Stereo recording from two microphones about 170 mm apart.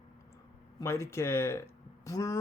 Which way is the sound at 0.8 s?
15° left (ahead or behind).